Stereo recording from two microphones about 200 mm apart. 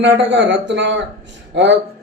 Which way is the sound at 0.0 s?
65° right (ahead or behind).